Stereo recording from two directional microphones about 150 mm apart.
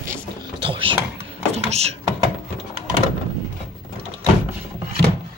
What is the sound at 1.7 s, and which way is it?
Speech, 45° right (ahead or behind).